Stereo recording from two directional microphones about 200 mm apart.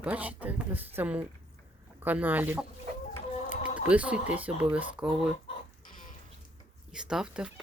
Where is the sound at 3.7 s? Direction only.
5° right (ahead or behind).